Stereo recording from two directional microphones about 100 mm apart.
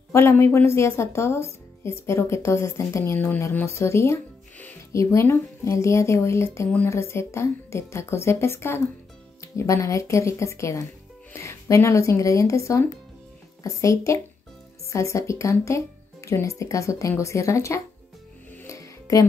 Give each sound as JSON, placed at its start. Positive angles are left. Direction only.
{"t": 0.1, "sound": "a woman's voice", "side_deg": 25}
{"t": 18.7, "sound": "music", "side_deg": 35}